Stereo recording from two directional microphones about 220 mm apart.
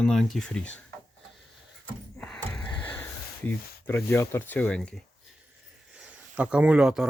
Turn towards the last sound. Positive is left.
turn(degrees=-5)  # may be behind; listen again after turning